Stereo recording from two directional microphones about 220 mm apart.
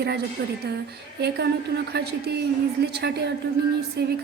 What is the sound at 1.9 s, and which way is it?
Speech, 45° right (ahead or behind).